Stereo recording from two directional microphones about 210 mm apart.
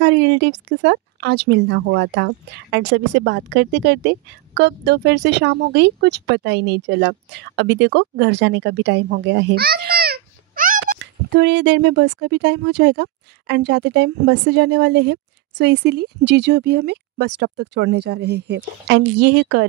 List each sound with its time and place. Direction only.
0.0 s speech: 55° right (ahead or behind)